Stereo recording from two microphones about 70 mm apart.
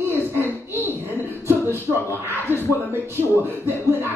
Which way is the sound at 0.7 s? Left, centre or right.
Right.